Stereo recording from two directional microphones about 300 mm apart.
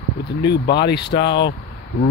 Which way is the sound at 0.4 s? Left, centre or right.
Left.